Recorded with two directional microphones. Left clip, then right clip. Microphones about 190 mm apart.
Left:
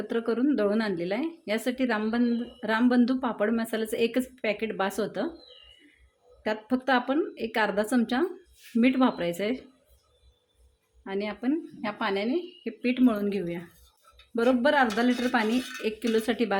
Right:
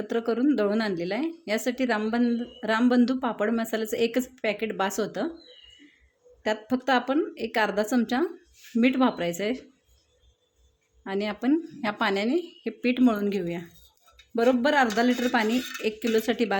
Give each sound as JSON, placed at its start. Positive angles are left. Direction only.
{"t": 0.1, "sound": "a woman's voice", "side_deg": -5}
{"t": 6.4, "sound": "a woman's voice", "side_deg": -5}
{"t": 11.0, "sound": "a woman's voice", "side_deg": -20}